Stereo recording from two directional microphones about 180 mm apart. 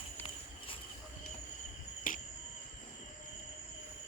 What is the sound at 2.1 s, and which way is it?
Cricket, 50° left (ahead or behind).